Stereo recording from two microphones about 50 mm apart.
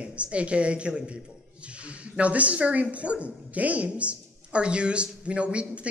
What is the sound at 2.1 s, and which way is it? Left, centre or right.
Speech, right.